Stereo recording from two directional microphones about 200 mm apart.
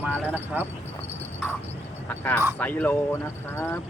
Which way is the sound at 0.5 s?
10° right (ahead or behind).